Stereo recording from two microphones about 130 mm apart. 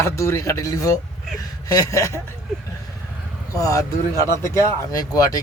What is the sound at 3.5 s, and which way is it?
A man's voice, 25° left (ahead or behind).